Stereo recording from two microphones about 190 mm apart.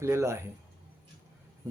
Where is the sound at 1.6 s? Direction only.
15° right (ahead or behind).